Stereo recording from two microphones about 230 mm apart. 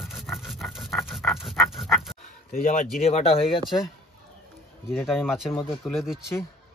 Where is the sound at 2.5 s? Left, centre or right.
Left.